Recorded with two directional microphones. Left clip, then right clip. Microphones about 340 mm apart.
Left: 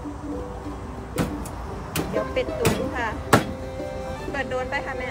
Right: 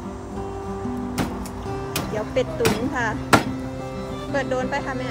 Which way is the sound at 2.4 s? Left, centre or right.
Centre.